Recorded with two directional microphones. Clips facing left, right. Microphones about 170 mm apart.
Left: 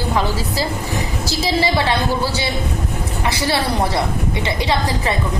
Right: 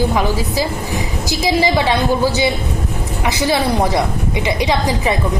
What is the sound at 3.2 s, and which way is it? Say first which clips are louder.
A woman's voice: right 4 dB; 20° right (ahead or behind).